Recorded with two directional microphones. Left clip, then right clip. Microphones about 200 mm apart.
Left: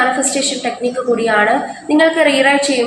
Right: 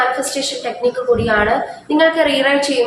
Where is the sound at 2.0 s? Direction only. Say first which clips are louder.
Left 2 dB; 15° left (ahead or behind).